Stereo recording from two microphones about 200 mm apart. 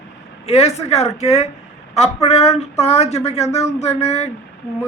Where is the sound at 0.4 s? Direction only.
30° left (ahead or behind).